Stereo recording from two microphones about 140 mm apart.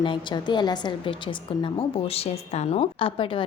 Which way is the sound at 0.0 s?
35° left (ahead or behind).